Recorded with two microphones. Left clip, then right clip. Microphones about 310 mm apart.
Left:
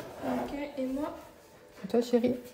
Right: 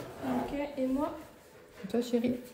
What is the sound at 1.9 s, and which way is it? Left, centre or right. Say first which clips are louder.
Speech: left 4 dB; left.